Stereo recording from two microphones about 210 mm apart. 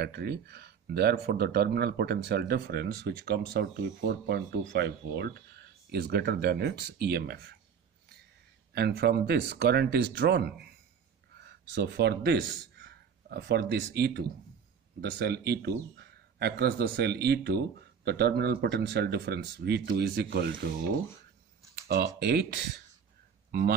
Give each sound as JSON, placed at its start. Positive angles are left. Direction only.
{"t": 0.0, "sound": "speech", "side_deg": -50}
{"t": 8.7, "sound": "speech", "side_deg": -50}
{"t": 21.8, "sound": "speech", "side_deg": -50}